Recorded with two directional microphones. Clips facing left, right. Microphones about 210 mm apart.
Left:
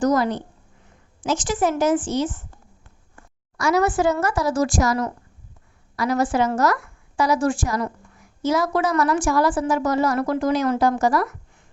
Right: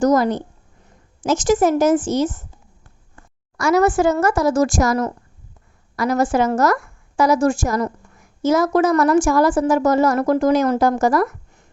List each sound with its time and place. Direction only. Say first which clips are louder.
0.0 s a woman's voice: right 4 dB; 45° right (ahead or behind)
3.6 s a woman's voice: right 4 dB; 45° right (ahead or behind)